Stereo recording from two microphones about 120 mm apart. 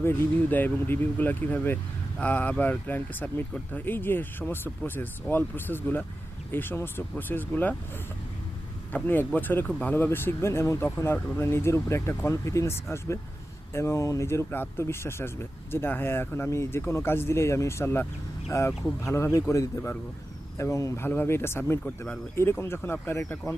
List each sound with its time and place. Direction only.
0.0 s speech: 15° left (ahead or behind)
9.0 s speech: 15° left (ahead or behind)